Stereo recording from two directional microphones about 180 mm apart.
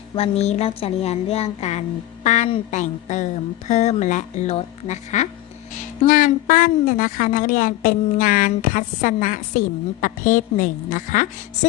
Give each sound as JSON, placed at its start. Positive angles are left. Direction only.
{"t": 0.2, "sound": "a woman's voice", "side_deg": 35}